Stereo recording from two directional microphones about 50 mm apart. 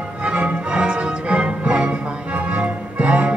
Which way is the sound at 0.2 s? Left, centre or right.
Right.